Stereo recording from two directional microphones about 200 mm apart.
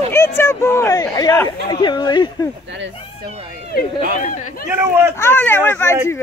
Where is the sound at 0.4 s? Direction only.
15° left (ahead or behind).